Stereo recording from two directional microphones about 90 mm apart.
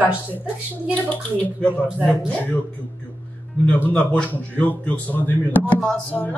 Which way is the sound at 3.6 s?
15° left (ahead or behind).